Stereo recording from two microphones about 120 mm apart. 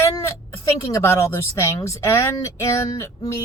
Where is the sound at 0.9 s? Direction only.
25° left (ahead or behind).